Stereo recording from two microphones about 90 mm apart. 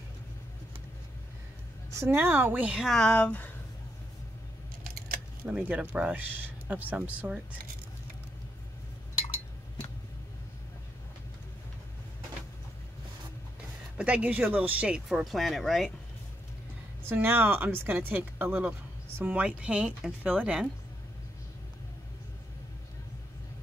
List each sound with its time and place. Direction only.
2.0 s speech: 25° right (ahead or behind)
2.8 s speech: 5° left (ahead or behind)
5.4 s speech: 15° right (ahead or behind)
13.9 s speech: 15° right (ahead or behind)
15.0 s speech: 5° right (ahead or behind)
17.0 s speech: 25° right (ahead or behind)